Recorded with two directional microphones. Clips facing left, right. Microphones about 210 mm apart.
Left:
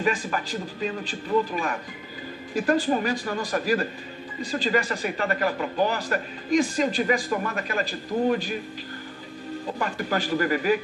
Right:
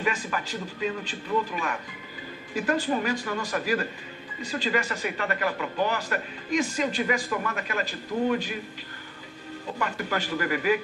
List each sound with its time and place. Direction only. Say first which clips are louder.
0.0 s speech: left 3 dB; 35° left (ahead or behind)
2.6 s speech: left 3 dB; 35° left (ahead or behind)
9.8 s speech: left 2 dB; 35° left (ahead or behind)